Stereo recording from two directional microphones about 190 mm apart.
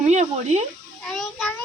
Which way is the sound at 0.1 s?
35° right (ahead or behind).